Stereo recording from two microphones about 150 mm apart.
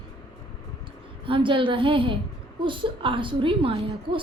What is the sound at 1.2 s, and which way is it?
A woman's voice, 35° right (ahead or behind).